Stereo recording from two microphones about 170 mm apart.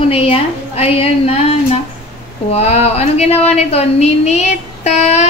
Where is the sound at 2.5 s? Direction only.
35° left (ahead or behind).